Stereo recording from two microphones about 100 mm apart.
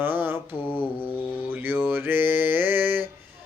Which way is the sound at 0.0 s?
20° right (ahead or behind).